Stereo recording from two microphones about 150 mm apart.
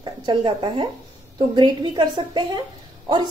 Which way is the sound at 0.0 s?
30° right (ahead or behind).